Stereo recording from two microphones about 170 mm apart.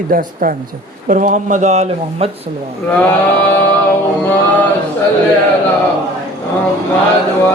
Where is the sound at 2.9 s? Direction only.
10° left (ahead or behind).